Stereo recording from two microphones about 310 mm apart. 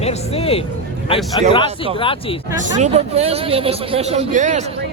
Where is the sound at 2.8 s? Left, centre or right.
Centre.